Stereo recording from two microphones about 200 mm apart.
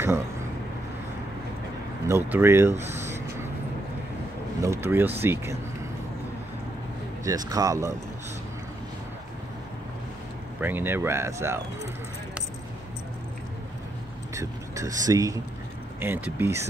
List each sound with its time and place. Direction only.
2.0 s speech: 10° right (ahead or behind)
4.6 s speech: 15° right (ahead or behind)
7.2 s speech: 20° right (ahead or behind)
10.6 s speech: 10° right (ahead or behind)
14.3 s speech: 15° right (ahead or behind)